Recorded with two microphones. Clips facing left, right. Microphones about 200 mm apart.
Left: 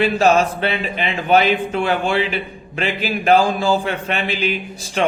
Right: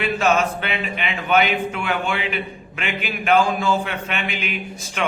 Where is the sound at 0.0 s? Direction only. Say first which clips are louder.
Left 4 dB; 35° left (ahead or behind).